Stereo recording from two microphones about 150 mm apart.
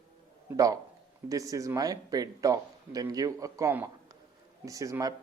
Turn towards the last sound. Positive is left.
turn(degrees=-20)  # may be behind; listen again after turning